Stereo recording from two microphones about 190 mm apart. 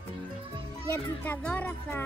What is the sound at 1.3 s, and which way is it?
Speech, 10° left (ahead or behind).